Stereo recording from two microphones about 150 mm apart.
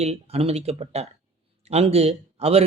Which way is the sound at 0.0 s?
45° right (ahead or behind).